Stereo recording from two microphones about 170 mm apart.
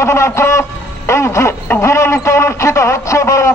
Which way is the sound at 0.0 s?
15° left (ahead or behind).